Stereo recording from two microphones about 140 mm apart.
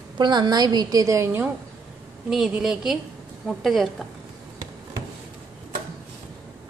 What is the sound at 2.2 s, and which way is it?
A woman's voice, 5° right (ahead or behind).